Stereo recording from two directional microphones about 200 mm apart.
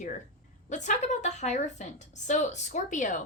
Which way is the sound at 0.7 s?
35° left (ahead or behind).